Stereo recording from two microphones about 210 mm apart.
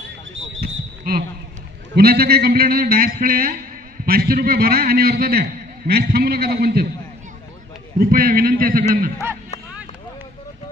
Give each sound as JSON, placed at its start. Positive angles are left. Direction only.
{"t": 0.3, "sound": "basketball bounce", "side_deg": -65}
{"t": 1.1, "sound": "a man's voice", "side_deg": -45}
{"t": 8.0, "sound": "a man's voice", "side_deg": -45}